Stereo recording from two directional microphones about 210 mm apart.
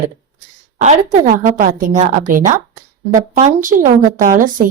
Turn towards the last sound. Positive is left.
turn(degrees=-40)  # may be behind; listen again after turning